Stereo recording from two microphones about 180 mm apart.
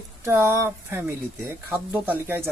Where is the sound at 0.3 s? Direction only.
15° right (ahead or behind).